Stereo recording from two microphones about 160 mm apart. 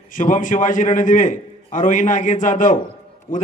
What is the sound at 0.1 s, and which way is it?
A man's voice, 55° left (ahead or behind).